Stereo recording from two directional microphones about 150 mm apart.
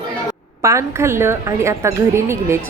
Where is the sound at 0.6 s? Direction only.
20° right (ahead or behind).